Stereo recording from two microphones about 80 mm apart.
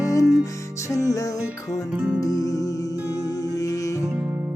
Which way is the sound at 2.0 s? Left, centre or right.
Right.